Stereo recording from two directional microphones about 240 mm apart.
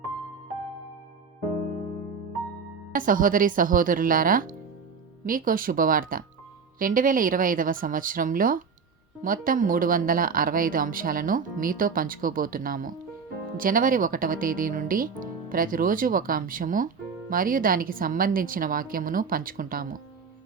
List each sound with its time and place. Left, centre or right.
2.9 s speech: right